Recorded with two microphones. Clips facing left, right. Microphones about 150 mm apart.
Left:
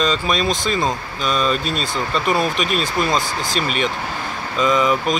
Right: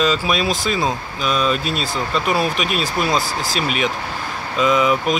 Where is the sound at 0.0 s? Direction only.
5° right (ahead or behind).